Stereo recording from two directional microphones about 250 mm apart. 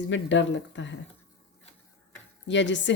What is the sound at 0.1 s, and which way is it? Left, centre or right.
Speech, left.